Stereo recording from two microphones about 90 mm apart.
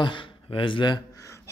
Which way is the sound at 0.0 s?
70° left (ahead or behind).